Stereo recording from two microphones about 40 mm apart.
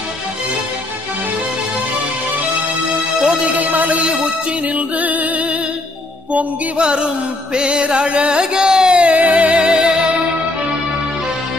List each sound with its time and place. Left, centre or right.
3.5 s music: right
6.8 s a sound: right
7.5 s music: right
9.6 s music: right